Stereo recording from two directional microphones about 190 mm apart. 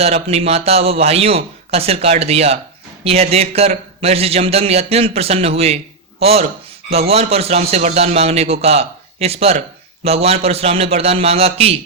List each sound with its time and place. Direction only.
0.0 s a man's voice: 35° right (ahead or behind)